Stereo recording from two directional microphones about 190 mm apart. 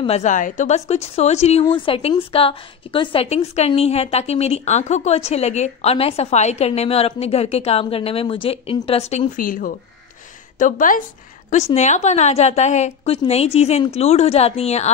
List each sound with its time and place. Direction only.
0.0 s a woman's voice: 35° left (ahead or behind)
9.4 s a woman's voice: 45° left (ahead or behind)